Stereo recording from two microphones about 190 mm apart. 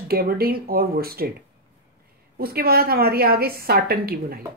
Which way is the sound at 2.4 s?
55° right (ahead or behind).